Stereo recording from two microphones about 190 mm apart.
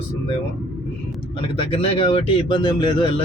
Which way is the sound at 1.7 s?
30° left (ahead or behind).